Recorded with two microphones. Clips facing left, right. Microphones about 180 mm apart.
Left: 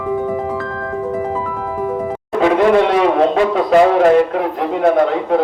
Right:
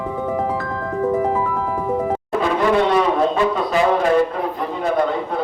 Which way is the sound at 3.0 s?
70° left (ahead or behind).